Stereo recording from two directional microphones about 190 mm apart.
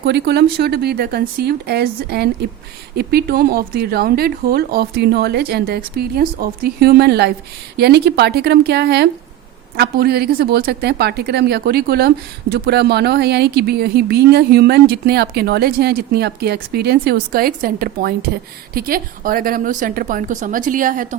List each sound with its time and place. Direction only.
0.0 s a woman's voice: 60° right (ahead or behind); by 21.2 s 45° right (ahead or behind)